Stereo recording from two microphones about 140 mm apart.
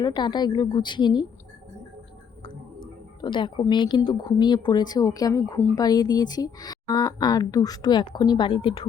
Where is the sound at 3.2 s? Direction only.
35° left (ahead or behind).